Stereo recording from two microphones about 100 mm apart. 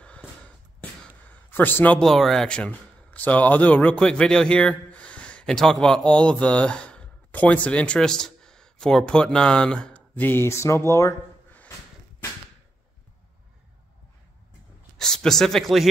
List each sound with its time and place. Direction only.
1.5 s a man's voice: 20° left (ahead or behind)
2.0 s a man's voice: centre (ahead or behind); by 11.1 s 30° left (ahead or behind)
15.0 s speech: 5° left (ahead or behind)